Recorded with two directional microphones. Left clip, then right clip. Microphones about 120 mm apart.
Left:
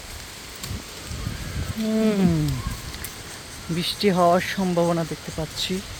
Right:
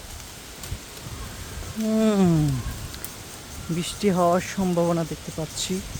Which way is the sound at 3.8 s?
20° right (ahead or behind).